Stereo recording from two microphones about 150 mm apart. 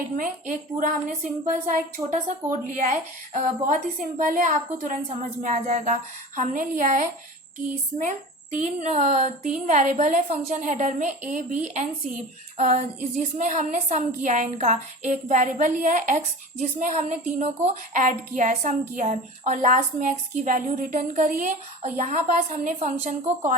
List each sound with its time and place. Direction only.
0.2 s a woman's voice: 60° right (ahead or behind)